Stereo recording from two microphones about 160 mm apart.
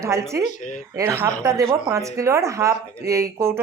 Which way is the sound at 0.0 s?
20° right (ahead or behind).